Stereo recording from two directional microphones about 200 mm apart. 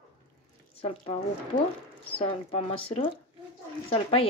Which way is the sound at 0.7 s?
30° left (ahead or behind).